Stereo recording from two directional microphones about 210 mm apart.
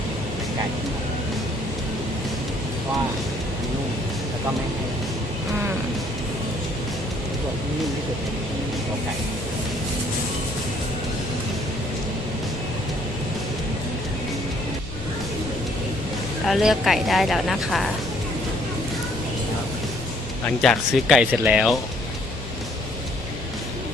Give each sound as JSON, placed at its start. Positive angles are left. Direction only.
{"t": 16.5, "sound": "speech", "side_deg": 0}
{"t": 20.6, "sound": "speech", "side_deg": 0}